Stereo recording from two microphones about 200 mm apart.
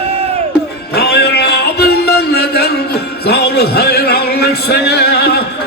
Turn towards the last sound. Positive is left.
turn(degrees=55)  # may be behind; listen again after turning